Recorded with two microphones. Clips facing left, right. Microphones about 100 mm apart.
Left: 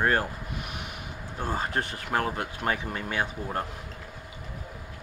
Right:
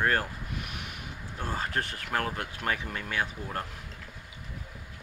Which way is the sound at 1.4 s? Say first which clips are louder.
Left 3 dB; 25° left (ahead or behind).